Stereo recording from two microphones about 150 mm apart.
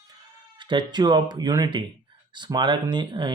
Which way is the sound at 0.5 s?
30° right (ahead or behind).